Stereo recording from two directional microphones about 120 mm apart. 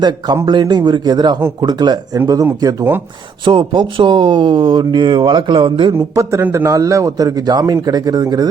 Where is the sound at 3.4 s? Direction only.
45° right (ahead or behind).